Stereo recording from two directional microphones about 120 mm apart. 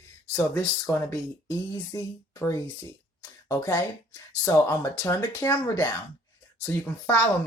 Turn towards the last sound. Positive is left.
turn(degrees=20)  # may be behind; listen again after turning